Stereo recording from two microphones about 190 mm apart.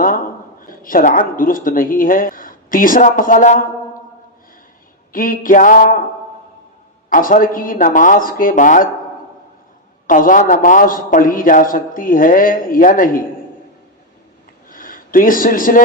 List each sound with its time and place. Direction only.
0.6 s a man's voice: 45° left (ahead or behind)
5.1 s a man's voice: 45° left (ahead or behind)
7.1 s a man's voice: 45° left (ahead or behind)
10.1 s a man's voice: 45° left (ahead or behind)
14.7 s a sound: 45° left (ahead or behind)